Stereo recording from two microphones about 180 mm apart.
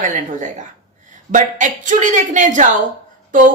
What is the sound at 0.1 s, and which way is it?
Speech, 45° right (ahead or behind).